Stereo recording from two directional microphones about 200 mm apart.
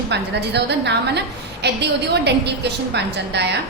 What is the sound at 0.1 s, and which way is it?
A woman's voice, 60° right (ahead or behind).